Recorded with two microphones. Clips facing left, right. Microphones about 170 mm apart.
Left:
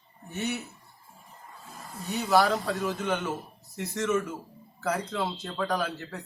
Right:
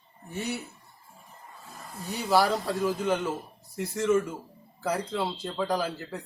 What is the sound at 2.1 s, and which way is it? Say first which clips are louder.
A man's voice: left 1 dB; 10° right (ahead or behind).